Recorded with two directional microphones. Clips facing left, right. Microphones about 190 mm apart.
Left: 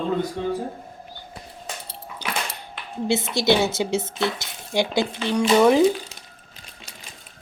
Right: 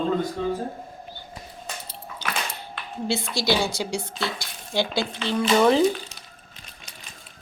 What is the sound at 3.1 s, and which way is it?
A woman's voice, 20° left (ahead or behind).